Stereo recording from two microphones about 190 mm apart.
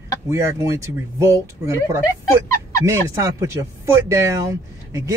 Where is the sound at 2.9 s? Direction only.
15° right (ahead or behind).